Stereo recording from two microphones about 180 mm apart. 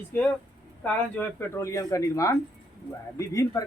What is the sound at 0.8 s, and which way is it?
Speech, 10° left (ahead or behind).